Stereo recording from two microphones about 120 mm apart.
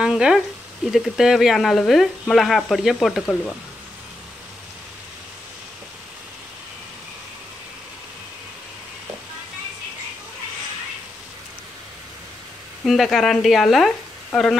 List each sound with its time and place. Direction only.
0.0 s frying: 5° right (ahead or behind)
0.9 s speech: centre (ahead or behind)
12.8 s speech: centre (ahead or behind)